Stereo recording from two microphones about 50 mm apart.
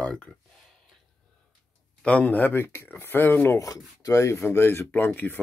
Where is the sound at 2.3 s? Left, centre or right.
Left.